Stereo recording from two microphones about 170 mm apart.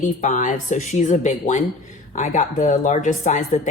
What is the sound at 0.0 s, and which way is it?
A woman's voice, 50° left (ahead or behind).